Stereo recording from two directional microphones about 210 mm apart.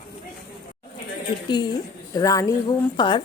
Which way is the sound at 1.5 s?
20° left (ahead or behind).